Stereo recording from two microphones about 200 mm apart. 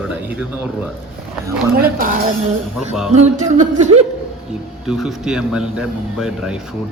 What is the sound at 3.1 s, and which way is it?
Speech, 35° right (ahead or behind).